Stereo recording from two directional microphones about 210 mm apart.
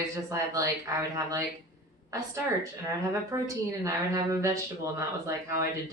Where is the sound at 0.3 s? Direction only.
15° right (ahead or behind).